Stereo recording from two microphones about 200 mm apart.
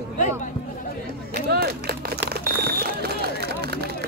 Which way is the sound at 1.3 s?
50° right (ahead or behind).